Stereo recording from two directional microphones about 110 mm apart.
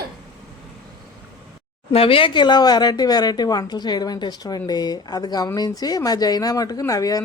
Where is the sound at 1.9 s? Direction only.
55° left (ahead or behind).